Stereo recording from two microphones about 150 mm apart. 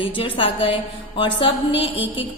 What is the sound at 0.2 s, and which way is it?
A woman's voice, 35° left (ahead or behind).